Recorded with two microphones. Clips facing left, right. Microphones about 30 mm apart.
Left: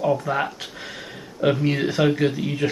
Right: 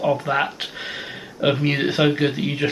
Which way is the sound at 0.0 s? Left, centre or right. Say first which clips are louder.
Right 2 dB; right.